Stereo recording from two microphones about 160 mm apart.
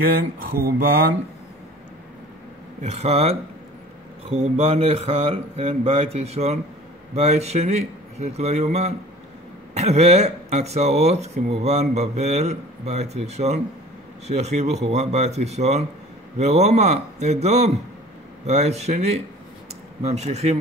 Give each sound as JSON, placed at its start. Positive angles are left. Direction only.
{"t": 0.0, "sound": "mantra", "side_deg": -65}
{"t": 2.8, "sound": "speech", "side_deg": -45}